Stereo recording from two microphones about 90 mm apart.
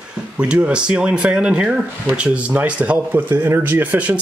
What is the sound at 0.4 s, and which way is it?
Speech, 15° right (ahead or behind).